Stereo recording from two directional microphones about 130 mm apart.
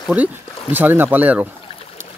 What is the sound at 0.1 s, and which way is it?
Speech, 10° right (ahead or behind).